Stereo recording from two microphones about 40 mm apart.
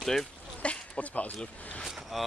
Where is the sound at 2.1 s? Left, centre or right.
Centre.